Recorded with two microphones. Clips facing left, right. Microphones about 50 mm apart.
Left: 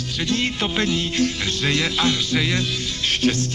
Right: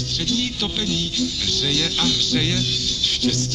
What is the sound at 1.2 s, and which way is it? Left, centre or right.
Music, left.